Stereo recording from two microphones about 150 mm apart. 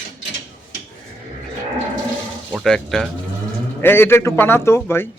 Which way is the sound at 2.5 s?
Centre (ahead or behind).